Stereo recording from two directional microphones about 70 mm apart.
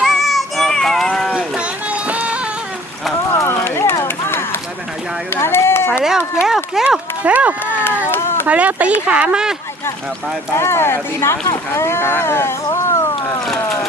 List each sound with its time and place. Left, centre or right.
0.0 s child singing: centre
1.0 s livestock: centre
1.5 s music: centre
3.3 s a sound: left
4.0 s run: left
5.3 s a sound: left
6.0 s speech: centre
7.2 s speech: right
10.6 s speech: left
11.7 s a sound: left
13.4 s vehicle: centre